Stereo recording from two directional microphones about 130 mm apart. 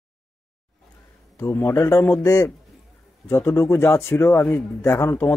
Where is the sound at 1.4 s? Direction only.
15° left (ahead or behind).